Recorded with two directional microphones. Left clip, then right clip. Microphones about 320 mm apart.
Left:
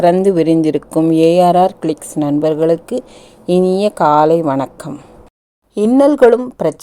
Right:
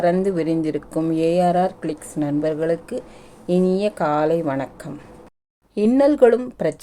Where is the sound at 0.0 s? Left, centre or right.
Left.